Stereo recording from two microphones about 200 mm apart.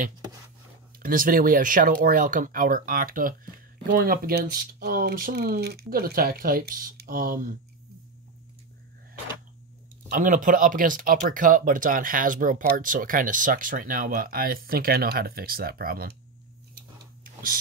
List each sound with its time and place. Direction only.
0.9 s speech: 45° right (ahead or behind)
10.0 s speech: 40° right (ahead or behind)
16.7 s a sound: 45° right (ahead or behind)